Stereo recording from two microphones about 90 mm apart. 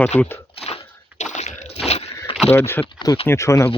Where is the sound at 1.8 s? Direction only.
90° left.